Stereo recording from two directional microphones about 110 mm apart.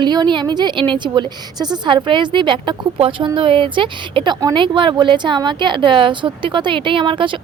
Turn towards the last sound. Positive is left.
turn(degrees=-50)  # may be behind; listen again after turning